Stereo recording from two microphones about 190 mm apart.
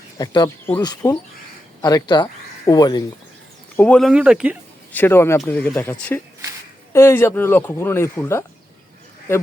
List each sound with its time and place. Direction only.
0.2 s speech: 20° left (ahead or behind)
3.8 s speech: 5° left (ahead or behind)
4.9 s speech: 10° left (ahead or behind)